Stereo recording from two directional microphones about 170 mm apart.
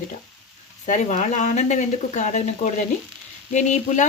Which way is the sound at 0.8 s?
45° left (ahead or behind).